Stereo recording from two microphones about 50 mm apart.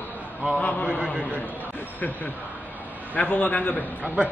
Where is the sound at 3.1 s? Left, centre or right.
Left.